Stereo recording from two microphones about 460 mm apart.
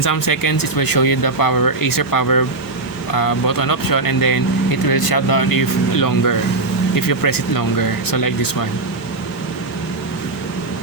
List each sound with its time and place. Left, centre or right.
0.0 s speech: left